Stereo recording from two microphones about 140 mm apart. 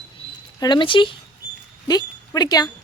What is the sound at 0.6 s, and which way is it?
Speech, 35° left (ahead or behind).